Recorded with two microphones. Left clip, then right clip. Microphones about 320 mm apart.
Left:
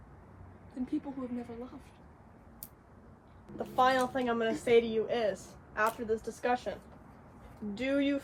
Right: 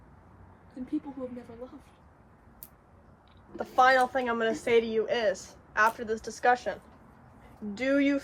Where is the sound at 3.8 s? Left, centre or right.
Right.